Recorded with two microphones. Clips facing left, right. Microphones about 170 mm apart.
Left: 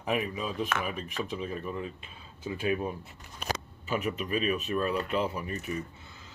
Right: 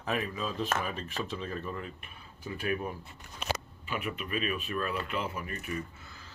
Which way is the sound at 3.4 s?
40° left (ahead or behind).